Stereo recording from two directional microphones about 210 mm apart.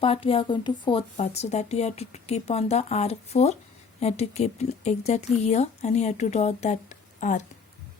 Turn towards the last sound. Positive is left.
turn(degrees=35)  # may be behind; listen again after turning